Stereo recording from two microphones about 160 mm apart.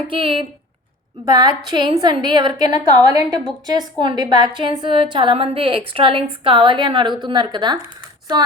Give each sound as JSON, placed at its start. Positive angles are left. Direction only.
{"t": 0.1, "sound": "a woman's voice", "side_deg": -30}